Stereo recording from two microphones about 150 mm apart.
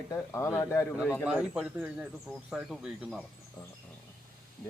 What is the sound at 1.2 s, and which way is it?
Speech, 5° right (ahead or behind).